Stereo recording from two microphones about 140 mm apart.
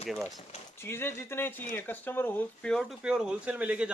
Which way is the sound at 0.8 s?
15° left (ahead or behind).